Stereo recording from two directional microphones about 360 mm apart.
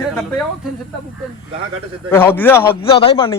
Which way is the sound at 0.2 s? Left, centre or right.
Centre.